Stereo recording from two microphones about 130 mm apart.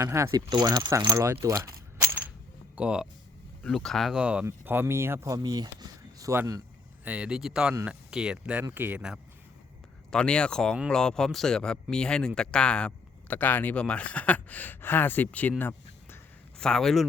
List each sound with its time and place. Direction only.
0.0 s speech: 25° right (ahead or behind)
2.7 s a man's voice: 5° right (ahead or behind)
7.0 s a man's voice: 10° right (ahead or behind)
10.1 s speech: 5° left (ahead or behind)
16.6 s speech: 5° left (ahead or behind)